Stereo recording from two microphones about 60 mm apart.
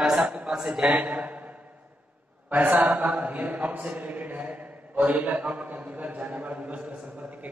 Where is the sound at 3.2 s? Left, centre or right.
Right.